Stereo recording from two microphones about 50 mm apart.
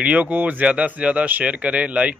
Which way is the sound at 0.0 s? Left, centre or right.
Right.